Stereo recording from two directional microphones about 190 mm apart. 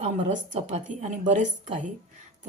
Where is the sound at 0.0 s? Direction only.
35° right (ahead or behind).